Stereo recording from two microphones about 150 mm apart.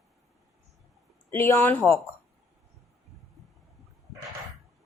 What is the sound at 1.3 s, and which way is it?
Speech, 15° left (ahead or behind).